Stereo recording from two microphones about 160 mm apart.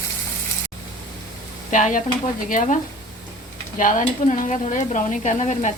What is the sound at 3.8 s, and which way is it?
Speech, 55° left (ahead or behind).